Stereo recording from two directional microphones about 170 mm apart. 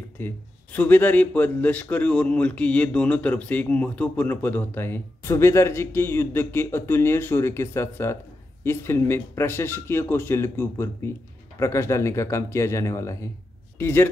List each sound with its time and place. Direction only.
0.2 s a man's voice: 10° left (ahead or behind)